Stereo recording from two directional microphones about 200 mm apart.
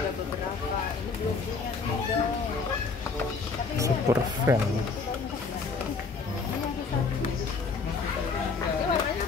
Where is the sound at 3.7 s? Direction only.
15° right (ahead or behind).